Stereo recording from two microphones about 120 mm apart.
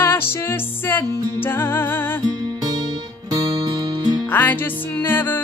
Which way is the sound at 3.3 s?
30° right (ahead or behind).